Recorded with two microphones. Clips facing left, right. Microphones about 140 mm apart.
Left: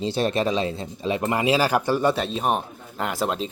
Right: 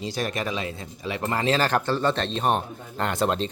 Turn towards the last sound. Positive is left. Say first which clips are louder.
# right 1 dB
turn(degrees=5)  # may be behind; listen again after turning